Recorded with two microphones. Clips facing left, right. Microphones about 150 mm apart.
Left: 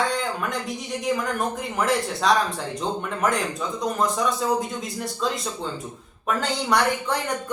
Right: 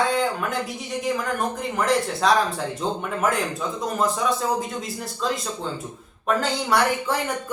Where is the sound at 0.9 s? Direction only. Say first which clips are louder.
Left 1 dB; centre (ahead or behind).